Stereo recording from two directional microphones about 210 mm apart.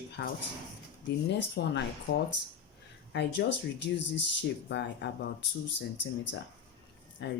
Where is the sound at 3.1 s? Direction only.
55° left (ahead or behind).